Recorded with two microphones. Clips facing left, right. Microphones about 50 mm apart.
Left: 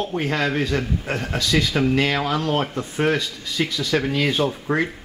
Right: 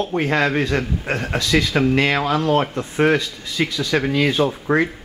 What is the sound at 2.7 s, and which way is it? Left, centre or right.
Speech, right.